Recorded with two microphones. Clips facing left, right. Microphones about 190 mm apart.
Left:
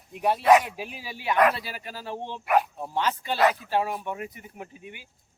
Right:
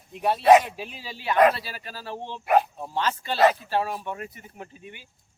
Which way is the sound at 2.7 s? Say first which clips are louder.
Even; 10° left (ahead or behind).